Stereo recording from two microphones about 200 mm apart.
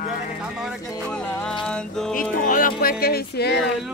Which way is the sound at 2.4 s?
45° left (ahead or behind).